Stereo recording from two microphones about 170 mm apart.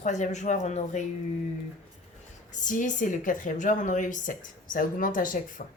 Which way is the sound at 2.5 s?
50° left (ahead or behind).